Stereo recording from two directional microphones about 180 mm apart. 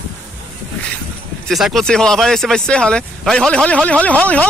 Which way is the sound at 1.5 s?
Centre (ahead or behind).